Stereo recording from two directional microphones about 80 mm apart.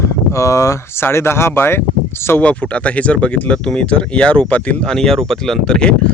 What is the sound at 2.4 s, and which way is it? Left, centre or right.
Speech, centre.